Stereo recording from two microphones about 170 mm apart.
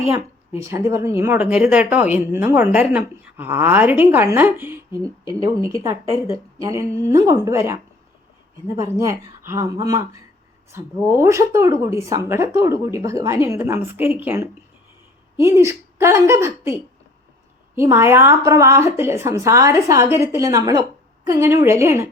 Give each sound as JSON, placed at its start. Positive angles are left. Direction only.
{"t": 0.1, "sound": "a woman's voice", "side_deg": -15}